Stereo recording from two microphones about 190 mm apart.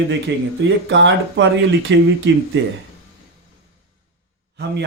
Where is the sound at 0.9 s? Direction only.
70° right (ahead or behind).